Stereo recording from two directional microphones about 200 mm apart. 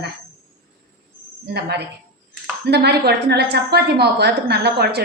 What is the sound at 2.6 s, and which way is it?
Speech, 55° right (ahead or behind).